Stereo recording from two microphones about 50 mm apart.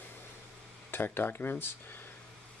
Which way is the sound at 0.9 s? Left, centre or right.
Left.